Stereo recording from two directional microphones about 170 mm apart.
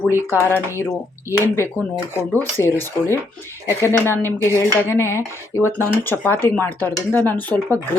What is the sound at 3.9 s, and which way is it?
Speech, 15° left (ahead or behind).